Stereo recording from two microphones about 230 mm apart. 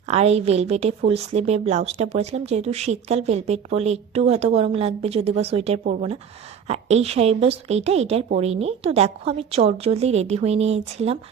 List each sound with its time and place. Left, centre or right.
0.1 s a woman's voice: right